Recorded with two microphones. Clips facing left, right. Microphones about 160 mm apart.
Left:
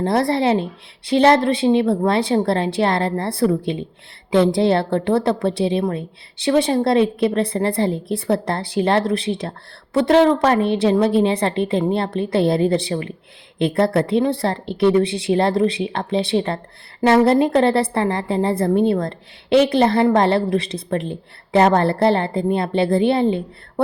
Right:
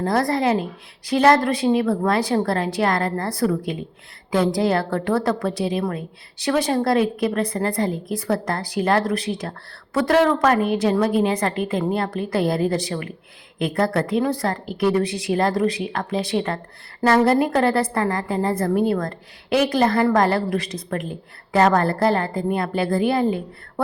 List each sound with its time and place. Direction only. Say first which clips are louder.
0.0 s a woman's voice: left 2 dB; 25° left (ahead or behind)